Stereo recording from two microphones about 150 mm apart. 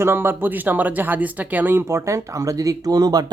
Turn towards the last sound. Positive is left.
turn(degrees=-25)  # may be behind; listen again after turning